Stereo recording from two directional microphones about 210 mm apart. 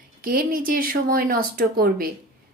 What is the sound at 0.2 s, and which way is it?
A woman's voice, 45° right (ahead or behind).